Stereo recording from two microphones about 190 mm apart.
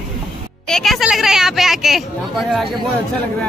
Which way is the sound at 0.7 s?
Centre (ahead or behind).